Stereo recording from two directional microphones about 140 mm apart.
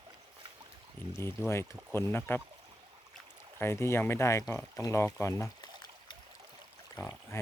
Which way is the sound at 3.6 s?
15° left (ahead or behind).